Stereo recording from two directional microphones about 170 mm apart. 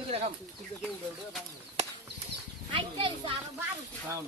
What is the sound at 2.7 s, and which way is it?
Speech, 30° right (ahead or behind).